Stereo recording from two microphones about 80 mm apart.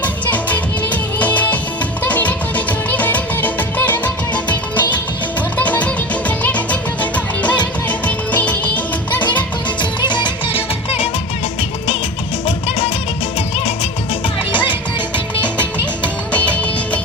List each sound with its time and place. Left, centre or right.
0.0 s music: left
10.1 s music: left
16.3 s music: centre